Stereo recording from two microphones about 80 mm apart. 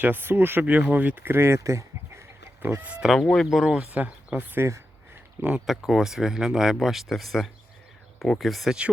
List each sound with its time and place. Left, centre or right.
0.0 s speech: right
2.6 s speech: right
2.9 s speech: centre
3.2 s speech: centre
3.5 s speech: centre
5.6 s speech: centre